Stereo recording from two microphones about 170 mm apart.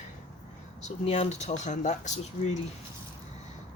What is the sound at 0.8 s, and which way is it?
Speech, 40° left (ahead or behind).